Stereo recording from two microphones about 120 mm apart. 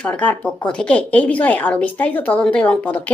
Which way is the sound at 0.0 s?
10° left (ahead or behind).